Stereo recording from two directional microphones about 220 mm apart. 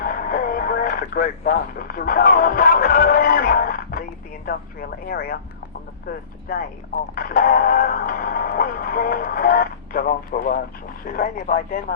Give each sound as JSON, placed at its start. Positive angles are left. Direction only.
{"t": 0.0, "sound": "radio", "side_deg": 45}
{"t": 4.4, "sound": "speech", "side_deg": 45}
{"t": 6.5, "sound": "speech", "side_deg": 40}